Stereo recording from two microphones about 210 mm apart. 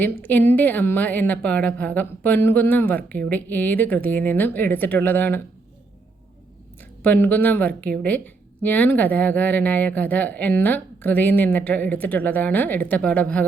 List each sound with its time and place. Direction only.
0.0 s a woman's voice: 10° left (ahead or behind)
7.0 s a woman's voice: 10° left (ahead or behind)